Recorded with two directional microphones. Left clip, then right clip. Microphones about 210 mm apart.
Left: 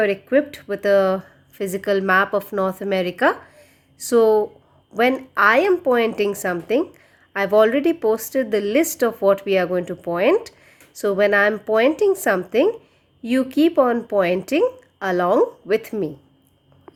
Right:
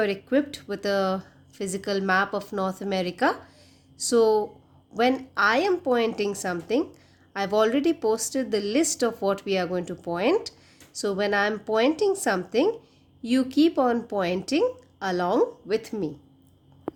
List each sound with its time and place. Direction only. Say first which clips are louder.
0.0 s speech: left 6 dB; 5° left (ahead or behind)